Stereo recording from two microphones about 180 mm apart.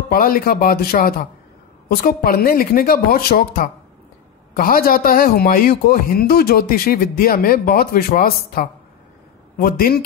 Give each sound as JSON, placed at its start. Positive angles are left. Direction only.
{"t": 0.1, "sound": "a man's voice", "side_deg": 55}